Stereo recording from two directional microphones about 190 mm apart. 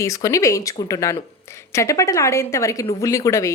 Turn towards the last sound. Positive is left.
turn(degrees=15)  # may be behind; listen again after turning